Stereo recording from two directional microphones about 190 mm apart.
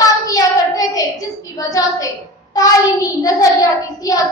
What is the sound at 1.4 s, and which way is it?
Speech, 20° left (ahead or behind).